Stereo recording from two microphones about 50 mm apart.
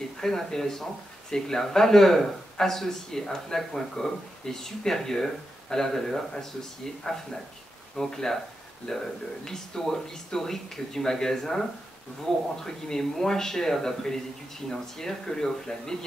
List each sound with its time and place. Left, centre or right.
0.2 s a man's voice: centre
12.6 s a man's voice: centre